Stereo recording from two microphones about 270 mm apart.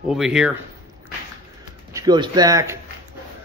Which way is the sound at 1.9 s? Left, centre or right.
Centre.